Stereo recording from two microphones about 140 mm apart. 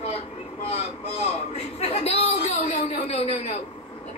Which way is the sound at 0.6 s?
45° left (ahead or behind).